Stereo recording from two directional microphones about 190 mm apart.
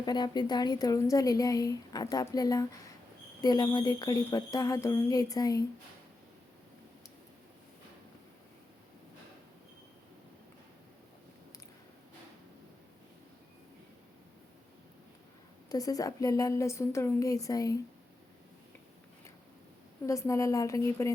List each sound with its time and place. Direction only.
0.0 s a woman's voice: 20° left (ahead or behind)
15.7 s a woman's voice: 20° left (ahead or behind)
20.1 s a woman's voice: 15° left (ahead or behind)